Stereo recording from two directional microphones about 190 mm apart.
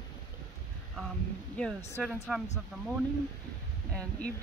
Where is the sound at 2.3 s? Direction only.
Centre (ahead or behind).